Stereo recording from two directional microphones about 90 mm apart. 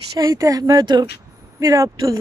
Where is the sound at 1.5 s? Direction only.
40° right (ahead or behind).